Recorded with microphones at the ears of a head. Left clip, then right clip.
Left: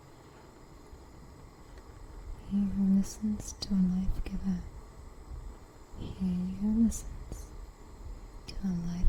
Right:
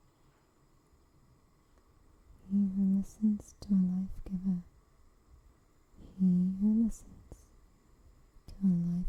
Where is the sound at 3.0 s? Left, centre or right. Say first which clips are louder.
Right 1 dB; left.